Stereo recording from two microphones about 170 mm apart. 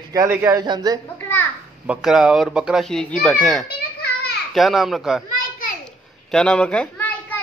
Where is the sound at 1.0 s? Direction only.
10° left (ahead or behind).